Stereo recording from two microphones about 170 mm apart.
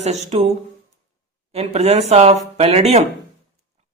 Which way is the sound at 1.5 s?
40° right (ahead or behind).